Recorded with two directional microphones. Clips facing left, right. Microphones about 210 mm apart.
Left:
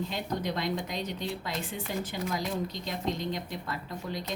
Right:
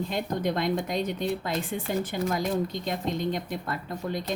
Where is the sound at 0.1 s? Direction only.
50° right (ahead or behind).